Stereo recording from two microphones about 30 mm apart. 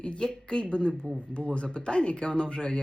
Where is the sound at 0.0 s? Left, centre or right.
Left.